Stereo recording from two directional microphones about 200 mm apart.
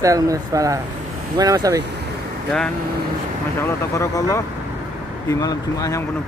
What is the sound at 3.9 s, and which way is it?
Speech, 15° left (ahead or behind).